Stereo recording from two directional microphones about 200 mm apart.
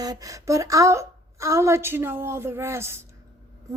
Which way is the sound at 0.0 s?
15° right (ahead or behind).